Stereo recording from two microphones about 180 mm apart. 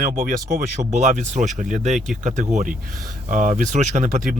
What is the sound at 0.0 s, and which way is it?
Speech, 50° right (ahead or behind).